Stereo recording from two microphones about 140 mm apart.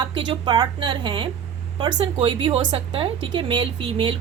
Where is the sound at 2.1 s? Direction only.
40° right (ahead or behind).